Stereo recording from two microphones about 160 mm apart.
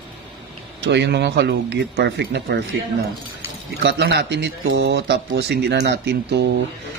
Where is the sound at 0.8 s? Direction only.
90° right.